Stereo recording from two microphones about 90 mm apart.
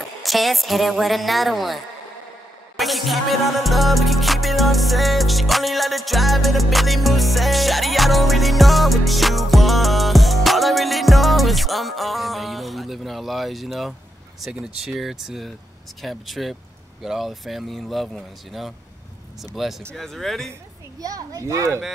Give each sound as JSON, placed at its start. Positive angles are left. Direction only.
{"t": 0.2, "sound": "speech", "side_deg": 0}
{"t": 2.8, "sound": "music", "side_deg": 0}
{"t": 14.4, "sound": "speech", "side_deg": -5}
{"t": 21.0, "sound": "speech", "side_deg": -40}